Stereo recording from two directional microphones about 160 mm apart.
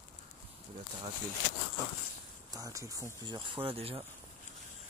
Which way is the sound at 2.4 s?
20° right (ahead or behind).